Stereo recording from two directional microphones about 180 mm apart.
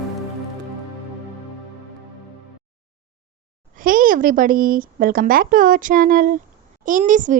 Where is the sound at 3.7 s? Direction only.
50° right (ahead or behind).